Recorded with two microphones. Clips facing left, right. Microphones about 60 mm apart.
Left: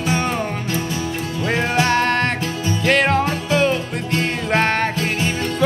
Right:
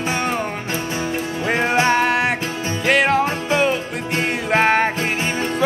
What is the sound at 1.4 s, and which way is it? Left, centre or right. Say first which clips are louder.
Music: right 1 dB; right.